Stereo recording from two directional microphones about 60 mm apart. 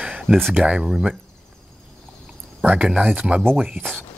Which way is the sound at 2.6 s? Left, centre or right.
Right.